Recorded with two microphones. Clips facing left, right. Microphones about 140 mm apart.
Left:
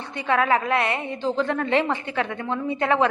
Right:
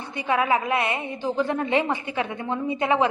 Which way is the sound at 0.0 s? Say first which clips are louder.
Left 1 dB; 10° right (ahead or behind).